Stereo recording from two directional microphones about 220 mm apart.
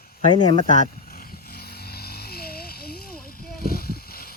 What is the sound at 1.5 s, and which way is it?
Vehicle, 45° left (ahead or behind).